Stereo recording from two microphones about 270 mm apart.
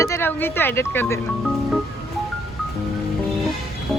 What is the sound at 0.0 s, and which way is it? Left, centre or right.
Speech, centre.